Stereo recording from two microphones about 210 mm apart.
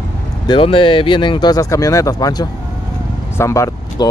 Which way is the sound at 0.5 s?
25° left (ahead or behind).